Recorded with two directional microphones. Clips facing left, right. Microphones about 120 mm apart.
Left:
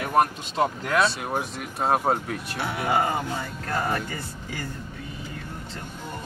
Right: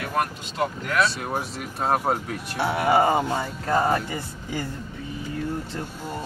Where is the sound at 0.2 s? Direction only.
25° left (ahead or behind).